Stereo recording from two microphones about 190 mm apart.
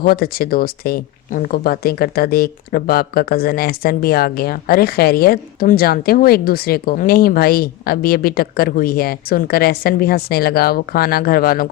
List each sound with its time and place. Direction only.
0.0 s speech: 50° left (ahead or behind)